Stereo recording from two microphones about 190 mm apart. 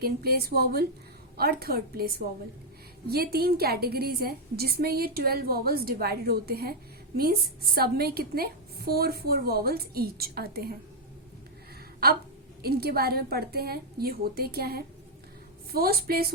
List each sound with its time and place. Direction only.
0.0 s a woman's voice: 55° right (ahead or behind)
3.3 s a woman's voice: 55° right (ahead or behind)
7.8 s a woman's voice: 55° right (ahead or behind)
12.6 s a woman's voice: 55° right (ahead or behind)